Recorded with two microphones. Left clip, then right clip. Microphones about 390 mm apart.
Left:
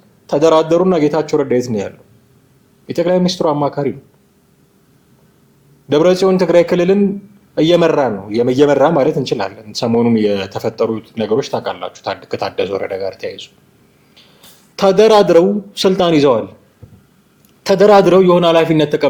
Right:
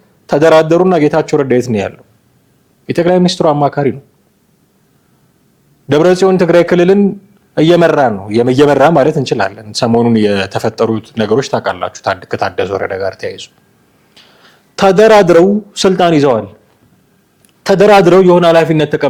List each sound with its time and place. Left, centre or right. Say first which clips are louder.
0.3 s a man's voice: right 4 dB; right
5.9 s a man's voice: right 3 dB; right
17.6 s a man's voice: right 2 dB; right